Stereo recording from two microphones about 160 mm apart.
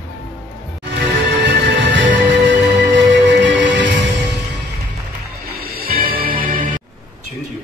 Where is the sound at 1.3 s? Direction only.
90° right.